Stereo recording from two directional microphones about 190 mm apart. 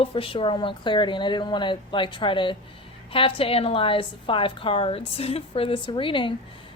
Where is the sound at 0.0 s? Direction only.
30° left (ahead or behind).